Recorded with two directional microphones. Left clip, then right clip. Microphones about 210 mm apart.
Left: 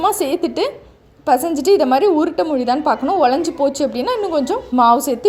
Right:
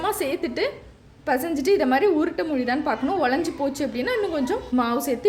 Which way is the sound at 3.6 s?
20° left (ahead or behind).